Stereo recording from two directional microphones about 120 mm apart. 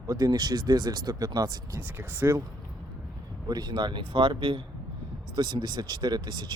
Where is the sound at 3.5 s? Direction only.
35° right (ahead or behind).